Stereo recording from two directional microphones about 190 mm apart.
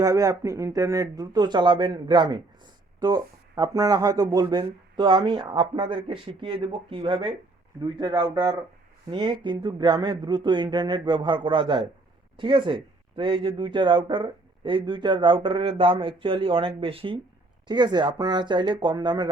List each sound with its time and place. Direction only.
0.0 s speech: 15° right (ahead or behind)